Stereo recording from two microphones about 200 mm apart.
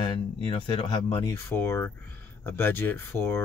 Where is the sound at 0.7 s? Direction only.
25° left (ahead or behind).